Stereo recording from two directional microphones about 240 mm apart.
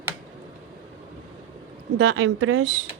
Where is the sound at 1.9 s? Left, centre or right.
Right.